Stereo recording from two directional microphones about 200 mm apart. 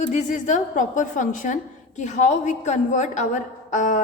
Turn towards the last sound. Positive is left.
turn(degrees=40)  # may be behind; listen again after turning